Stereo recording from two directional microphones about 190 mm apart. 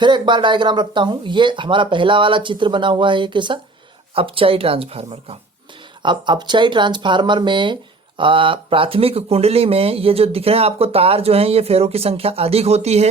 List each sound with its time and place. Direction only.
0.0 s speech: 25° right (ahead or behind)